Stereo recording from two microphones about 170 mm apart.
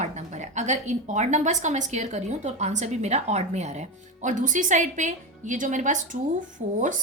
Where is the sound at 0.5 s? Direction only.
45° right (ahead or behind).